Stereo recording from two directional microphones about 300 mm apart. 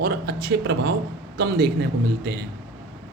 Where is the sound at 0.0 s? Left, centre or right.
Right.